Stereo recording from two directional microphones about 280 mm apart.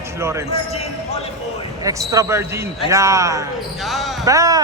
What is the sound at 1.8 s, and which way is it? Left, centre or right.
Speech, centre.